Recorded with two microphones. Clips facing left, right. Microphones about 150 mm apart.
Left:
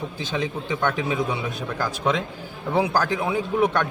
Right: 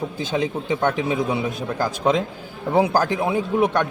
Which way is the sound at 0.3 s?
30° right (ahead or behind).